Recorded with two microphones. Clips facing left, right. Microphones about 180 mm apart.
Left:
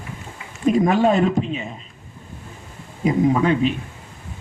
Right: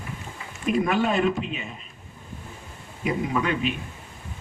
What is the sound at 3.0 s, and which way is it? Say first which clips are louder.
Speech: left 8 dB; 40° left (ahead or behind).